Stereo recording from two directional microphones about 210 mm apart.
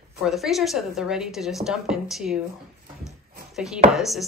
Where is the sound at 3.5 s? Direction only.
Centre (ahead or behind).